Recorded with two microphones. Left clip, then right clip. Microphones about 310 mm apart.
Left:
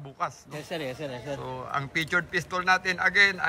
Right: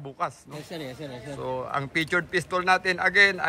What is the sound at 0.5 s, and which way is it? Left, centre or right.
Speech, centre.